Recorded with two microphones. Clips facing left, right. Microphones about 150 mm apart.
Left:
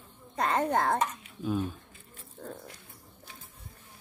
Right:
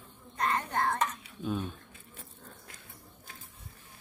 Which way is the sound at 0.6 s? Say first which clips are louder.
Left 5 dB; 90° left.